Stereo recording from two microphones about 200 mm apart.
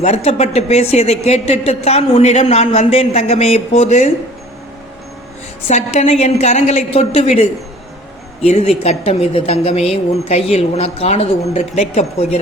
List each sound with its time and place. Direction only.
0.0 s speech: 30° left (ahead or behind)
5.6 s speech: 35° left (ahead or behind)